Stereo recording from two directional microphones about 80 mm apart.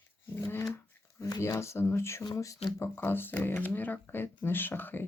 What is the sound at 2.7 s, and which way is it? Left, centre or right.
Speech, left.